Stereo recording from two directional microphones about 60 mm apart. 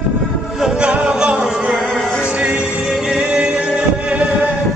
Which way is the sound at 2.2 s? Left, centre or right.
Centre.